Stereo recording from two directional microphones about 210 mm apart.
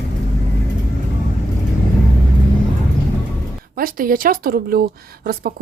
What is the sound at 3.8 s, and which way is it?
Speech, 40° right (ahead or behind).